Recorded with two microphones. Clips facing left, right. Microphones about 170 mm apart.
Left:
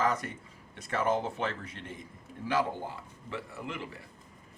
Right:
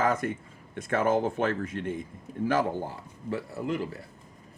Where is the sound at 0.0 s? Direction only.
50° right (ahead or behind).